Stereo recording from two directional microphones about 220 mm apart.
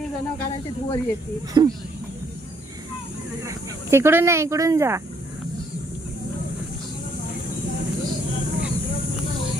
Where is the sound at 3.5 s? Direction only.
10° right (ahead or behind).